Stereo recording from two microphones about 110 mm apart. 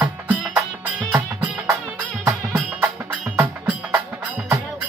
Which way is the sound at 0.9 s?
15° right (ahead or behind).